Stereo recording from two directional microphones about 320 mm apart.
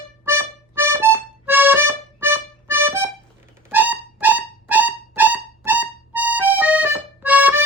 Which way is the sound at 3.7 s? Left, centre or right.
Centre.